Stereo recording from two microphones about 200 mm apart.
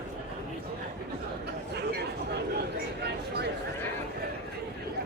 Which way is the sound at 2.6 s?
55° right (ahead or behind).